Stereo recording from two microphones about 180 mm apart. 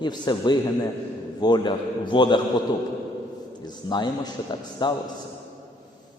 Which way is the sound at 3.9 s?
25° left (ahead or behind).